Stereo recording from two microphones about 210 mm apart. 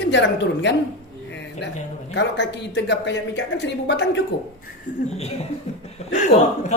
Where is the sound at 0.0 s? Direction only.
55° left (ahead or behind).